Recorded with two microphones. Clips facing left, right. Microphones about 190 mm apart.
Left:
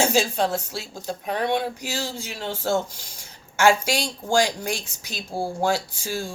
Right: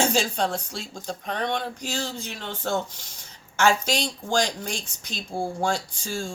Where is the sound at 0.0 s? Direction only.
5° left (ahead or behind).